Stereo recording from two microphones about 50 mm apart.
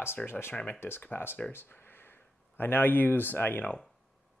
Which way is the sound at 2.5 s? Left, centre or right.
Left.